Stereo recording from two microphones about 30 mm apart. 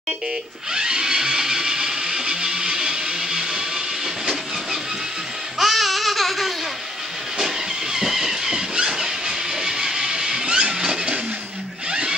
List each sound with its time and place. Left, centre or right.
0.7 s music: right
5.6 s babbling: centre
7.9 s a sound: centre
9.6 s music: centre
10.4 s a sound: right
10.7 s vehicle: right